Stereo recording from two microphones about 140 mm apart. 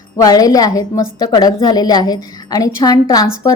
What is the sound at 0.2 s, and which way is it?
A woman's voice, 25° left (ahead or behind).